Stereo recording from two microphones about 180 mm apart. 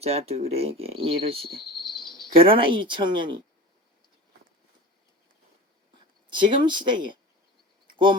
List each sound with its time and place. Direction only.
0.0 s speech: 35° right (ahead or behind)
2.0 s cricket: centre (ahead or behind)
2.4 s speech: 30° right (ahead or behind)
6.3 s speech: 25° right (ahead or behind)